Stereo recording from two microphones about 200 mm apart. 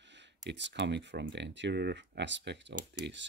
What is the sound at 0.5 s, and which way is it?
Speech, 60° right (ahead or behind).